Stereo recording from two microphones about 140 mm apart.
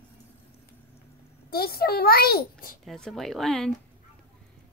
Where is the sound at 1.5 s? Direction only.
90° left.